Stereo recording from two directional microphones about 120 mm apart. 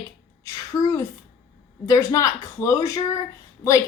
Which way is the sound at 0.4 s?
25° left (ahead or behind).